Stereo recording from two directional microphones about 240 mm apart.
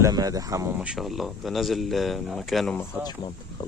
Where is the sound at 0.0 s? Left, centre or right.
Centre.